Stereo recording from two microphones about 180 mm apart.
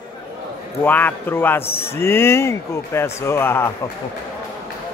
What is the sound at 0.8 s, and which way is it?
Speech, 10° left (ahead or behind).